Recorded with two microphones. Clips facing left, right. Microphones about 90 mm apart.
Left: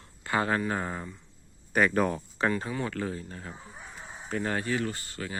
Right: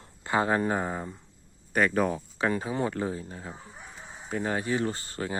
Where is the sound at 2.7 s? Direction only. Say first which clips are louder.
Right 3 dB; 25° right (ahead or behind).